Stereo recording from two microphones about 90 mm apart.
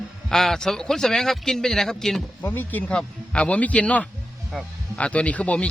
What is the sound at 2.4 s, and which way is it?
Speech, 20° left (ahead or behind).